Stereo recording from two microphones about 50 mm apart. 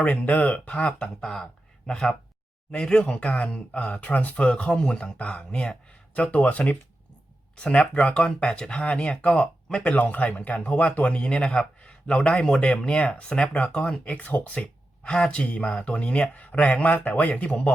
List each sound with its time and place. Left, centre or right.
0.0 s speech: left
1.0 s speech: centre
9.8 s speech: left
15.1 s speech: centre
15.4 s speech: left